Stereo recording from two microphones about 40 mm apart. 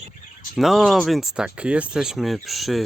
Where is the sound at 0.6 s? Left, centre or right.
Centre.